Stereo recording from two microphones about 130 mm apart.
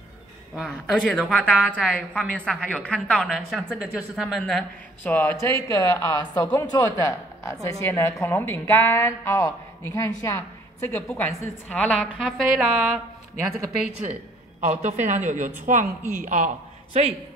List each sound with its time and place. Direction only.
0.6 s a woman's voice: 5° left (ahead or behind)
11.7 s speech: 5° left (ahead or behind)
14.6 s speech: 60° right (ahead or behind)
15.6 s a woman's voice: 85° right